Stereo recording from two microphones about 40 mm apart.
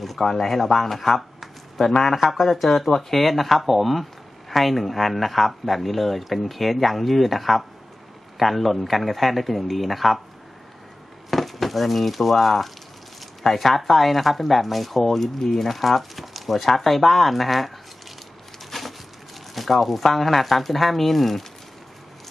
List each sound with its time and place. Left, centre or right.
0.0 s speech: centre
11.2 s speech: centre
18.7 s a sound: centre
19.5 s speech: centre